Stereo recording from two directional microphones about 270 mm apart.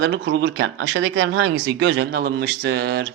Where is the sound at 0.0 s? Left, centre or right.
Right.